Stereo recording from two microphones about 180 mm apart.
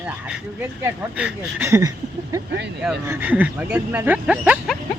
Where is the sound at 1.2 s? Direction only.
10° right (ahead or behind).